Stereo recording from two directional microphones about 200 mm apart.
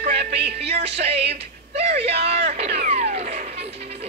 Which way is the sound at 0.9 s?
30° right (ahead or behind).